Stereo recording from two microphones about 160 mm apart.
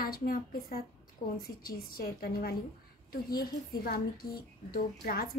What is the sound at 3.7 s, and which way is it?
A woman's voice, 70° left (ahead or behind).